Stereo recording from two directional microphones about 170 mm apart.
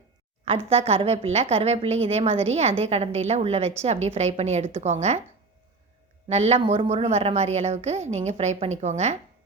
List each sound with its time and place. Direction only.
0.7 s a woman's voice: 35° right (ahead or behind)
6.2 s a woman's voice: 40° right (ahead or behind)